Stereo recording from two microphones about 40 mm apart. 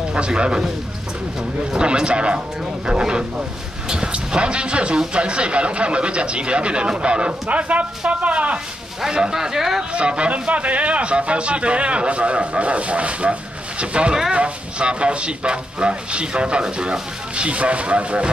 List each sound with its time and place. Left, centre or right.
0.1 s speech: right
1.7 s speech: right
8.1 s a sound: right
9.0 s speech: centre
9.9 s speech: right